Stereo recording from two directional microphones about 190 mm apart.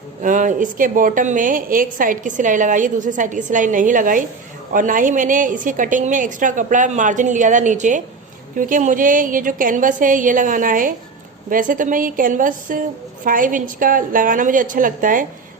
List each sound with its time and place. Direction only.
0.2 s a woman's voice: 45° right (ahead or behind)